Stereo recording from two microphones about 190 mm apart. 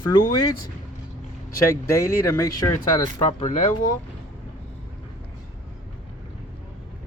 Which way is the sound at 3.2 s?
30° left (ahead or behind).